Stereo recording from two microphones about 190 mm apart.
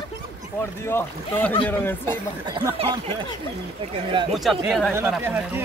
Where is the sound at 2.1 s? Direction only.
25° right (ahead or behind).